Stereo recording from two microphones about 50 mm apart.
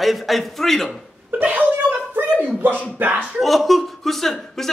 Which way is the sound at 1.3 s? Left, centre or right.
Right.